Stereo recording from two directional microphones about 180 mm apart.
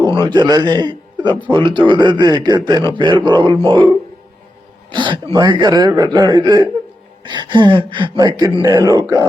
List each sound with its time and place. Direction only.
0.3 s a man's voice: 25° right (ahead or behind)